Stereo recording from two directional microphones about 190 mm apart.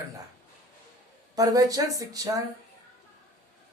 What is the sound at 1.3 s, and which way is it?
Speech, 20° right (ahead or behind).